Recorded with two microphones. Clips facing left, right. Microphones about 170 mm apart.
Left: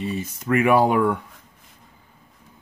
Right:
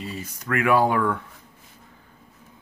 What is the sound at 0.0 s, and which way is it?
Speech, 25° left (ahead or behind).